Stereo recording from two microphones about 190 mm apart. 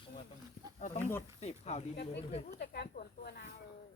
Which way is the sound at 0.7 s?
40° left (ahead or behind).